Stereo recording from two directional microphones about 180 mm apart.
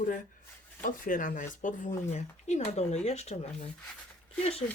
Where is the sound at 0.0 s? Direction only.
45° left (ahead or behind).